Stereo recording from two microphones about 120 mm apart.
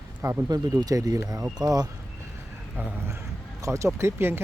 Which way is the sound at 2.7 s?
15° right (ahead or behind).